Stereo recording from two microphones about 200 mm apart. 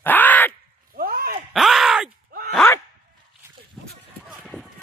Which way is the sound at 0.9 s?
45° right (ahead or behind).